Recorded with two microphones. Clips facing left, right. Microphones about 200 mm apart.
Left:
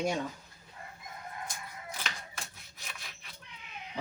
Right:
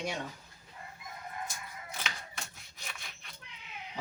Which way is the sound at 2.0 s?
Centre (ahead or behind).